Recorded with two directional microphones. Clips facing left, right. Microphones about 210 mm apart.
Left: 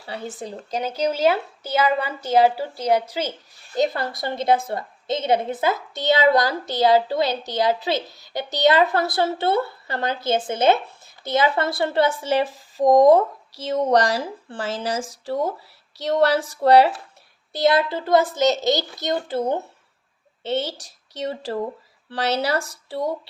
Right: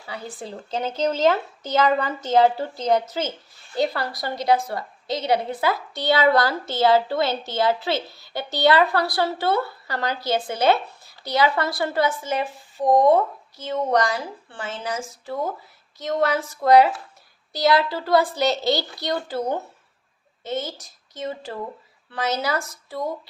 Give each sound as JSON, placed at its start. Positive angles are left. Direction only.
{"t": 0.0, "sound": "speech", "side_deg": 35}
{"t": 0.3, "sound": "a woman's voice", "side_deg": 15}
{"t": 16.0, "sound": "a woman's voice", "side_deg": 35}